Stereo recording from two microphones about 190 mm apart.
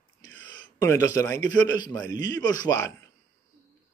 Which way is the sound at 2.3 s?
20° left (ahead or behind).